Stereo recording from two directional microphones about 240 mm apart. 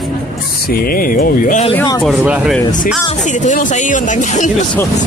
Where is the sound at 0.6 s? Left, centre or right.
Left.